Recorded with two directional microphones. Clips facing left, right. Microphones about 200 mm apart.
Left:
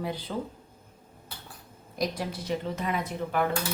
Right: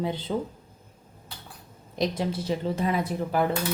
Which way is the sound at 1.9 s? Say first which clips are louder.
Right 4 dB; 25° right (ahead or behind).